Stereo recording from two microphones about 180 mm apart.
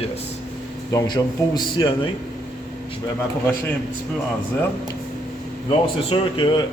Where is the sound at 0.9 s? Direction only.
25° left (ahead or behind).